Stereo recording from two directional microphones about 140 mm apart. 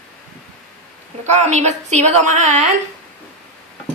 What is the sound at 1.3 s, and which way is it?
A woman's voice, 55° right (ahead or behind).